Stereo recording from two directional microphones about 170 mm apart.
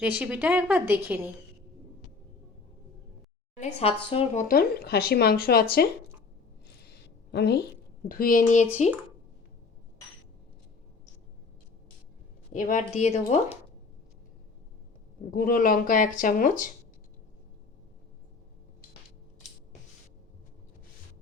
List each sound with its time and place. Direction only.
0.2 s a woman's voice: 10° right (ahead or behind)
3.6 s a woman's voice: 40° left (ahead or behind)
4.4 s speech: 65° left (ahead or behind)
7.3 s a woman's voice: 75° left (ahead or behind)
8.0 s speech: 55° left (ahead or behind)
12.5 s speech: 50° left (ahead or behind)
15.3 s speech: 60° left (ahead or behind)